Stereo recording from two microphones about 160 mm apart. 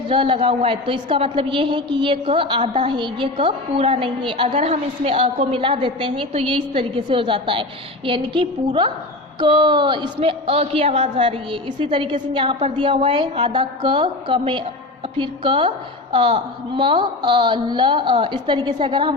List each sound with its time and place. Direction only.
0.1 s a woman's voice: 35° right (ahead or behind)